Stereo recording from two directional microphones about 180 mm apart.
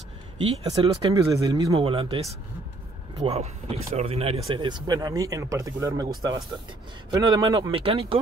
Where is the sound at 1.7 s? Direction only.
30° right (ahead or behind).